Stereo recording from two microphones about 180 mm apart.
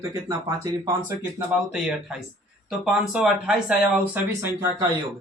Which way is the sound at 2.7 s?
5° right (ahead or behind).